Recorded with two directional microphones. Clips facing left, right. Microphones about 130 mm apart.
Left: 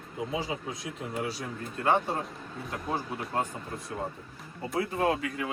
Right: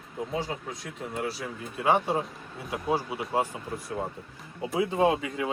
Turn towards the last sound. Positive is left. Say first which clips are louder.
# right 4 dB
turn(degrees=-20)  # may be behind; listen again after turning